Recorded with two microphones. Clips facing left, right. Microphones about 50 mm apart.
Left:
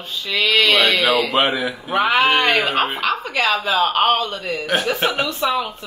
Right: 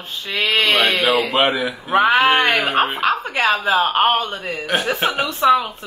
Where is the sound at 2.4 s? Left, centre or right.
Centre.